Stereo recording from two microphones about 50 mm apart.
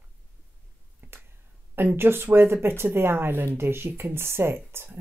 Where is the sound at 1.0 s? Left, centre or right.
Right.